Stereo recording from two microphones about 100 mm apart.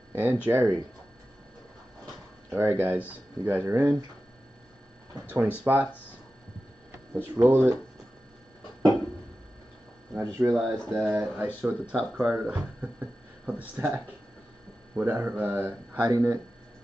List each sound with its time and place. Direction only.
0.1 s speech: 20° right (ahead or behind)
2.5 s speech: 25° right (ahead or behind)
5.2 s speech: 15° right (ahead or behind)
7.3 s speech: 25° right (ahead or behind)
10.1 s speech: 25° right (ahead or behind); by 12.5 s 5° right (ahead or behind)
12.5 s a sound: 15° right (ahead or behind)
13.7 s speech: 20° right (ahead or behind)
16.1 s speech: 30° right (ahead or behind)